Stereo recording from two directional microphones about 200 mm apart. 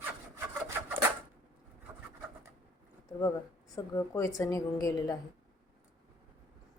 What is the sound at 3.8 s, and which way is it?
A woman's voice, 15° left (ahead or behind).